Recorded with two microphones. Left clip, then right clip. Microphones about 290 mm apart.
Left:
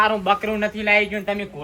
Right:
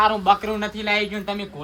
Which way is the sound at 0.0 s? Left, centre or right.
Right.